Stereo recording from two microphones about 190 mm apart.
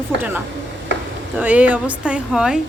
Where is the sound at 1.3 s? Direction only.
10° right (ahead or behind).